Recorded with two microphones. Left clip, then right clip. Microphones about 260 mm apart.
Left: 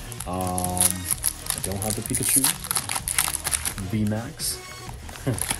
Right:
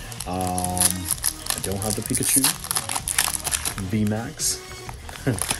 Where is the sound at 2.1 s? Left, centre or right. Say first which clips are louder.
Right 3 dB; centre.